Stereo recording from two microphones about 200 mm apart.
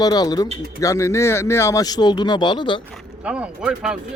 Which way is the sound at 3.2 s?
5° right (ahead or behind).